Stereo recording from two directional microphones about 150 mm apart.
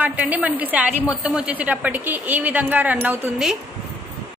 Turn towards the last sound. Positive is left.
turn(degrees=-5)  # may be behind; listen again after turning